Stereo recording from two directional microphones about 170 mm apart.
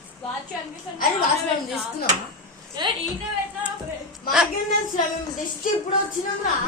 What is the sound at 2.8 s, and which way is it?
Speech, 25° right (ahead or behind).